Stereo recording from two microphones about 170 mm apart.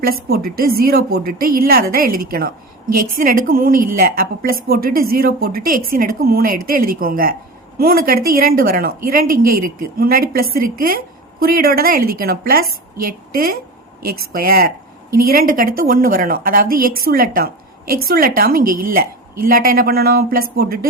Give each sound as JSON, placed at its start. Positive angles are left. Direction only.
{"t": 0.0, "sound": "a woman's voice", "side_deg": -60}